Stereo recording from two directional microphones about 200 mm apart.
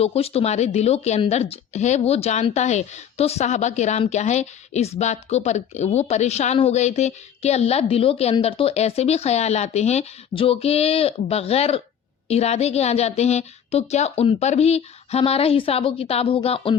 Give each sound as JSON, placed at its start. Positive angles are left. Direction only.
{"t": 0.0, "sound": "a woman's voice", "side_deg": 30}